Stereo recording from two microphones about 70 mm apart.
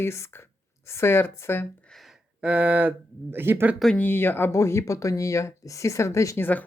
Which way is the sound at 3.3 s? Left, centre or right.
Right.